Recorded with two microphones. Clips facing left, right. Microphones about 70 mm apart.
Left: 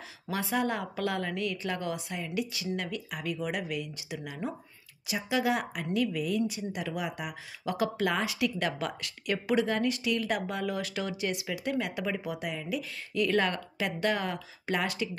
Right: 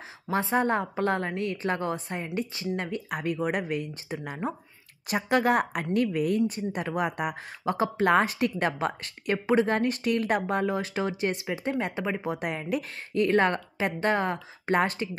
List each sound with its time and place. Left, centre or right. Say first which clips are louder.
0.3 s speech: right 5 dB; right
5.0 s a woman's voice: right 5 dB; right
7.6 s speech: right 4 dB; right